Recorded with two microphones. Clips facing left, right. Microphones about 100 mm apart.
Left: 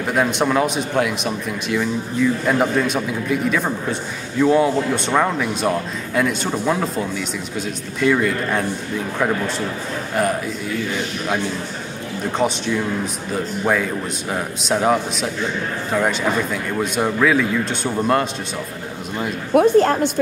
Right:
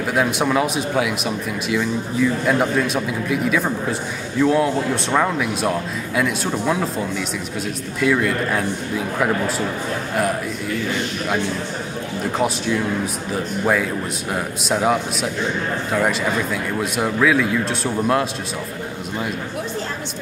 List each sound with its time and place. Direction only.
0.0 s speech: centre (ahead or behind)
12.3 s speech: centre (ahead or behind)
19.5 s speech: 55° left (ahead or behind)